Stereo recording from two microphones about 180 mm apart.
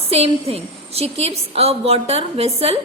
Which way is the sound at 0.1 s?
35° right (ahead or behind).